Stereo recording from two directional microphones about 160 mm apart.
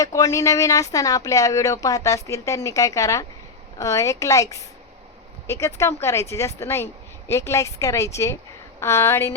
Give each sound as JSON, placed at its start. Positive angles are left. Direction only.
{"t": 0.0, "sound": "a woman's voice", "side_deg": 20}